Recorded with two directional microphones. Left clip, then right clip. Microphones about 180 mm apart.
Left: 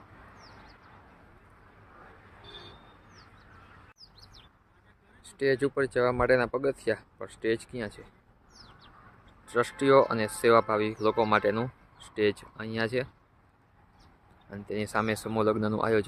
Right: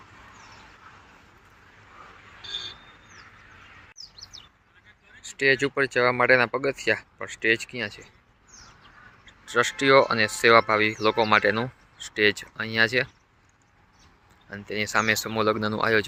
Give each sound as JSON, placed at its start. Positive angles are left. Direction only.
{"t": 2.4, "sound": "vehicle", "side_deg": 55}
{"t": 5.2, "sound": "speech", "side_deg": 0}
{"t": 9.2, "sound": "speech", "side_deg": 5}
{"t": 14.5, "sound": "speech", "side_deg": 5}